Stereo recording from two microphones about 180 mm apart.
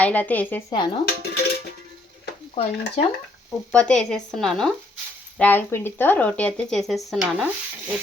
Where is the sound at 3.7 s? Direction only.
5° left (ahead or behind).